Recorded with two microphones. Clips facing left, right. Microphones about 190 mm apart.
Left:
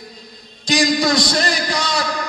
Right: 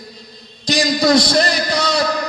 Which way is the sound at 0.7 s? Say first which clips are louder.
Right 2 dB; 40° right (ahead or behind).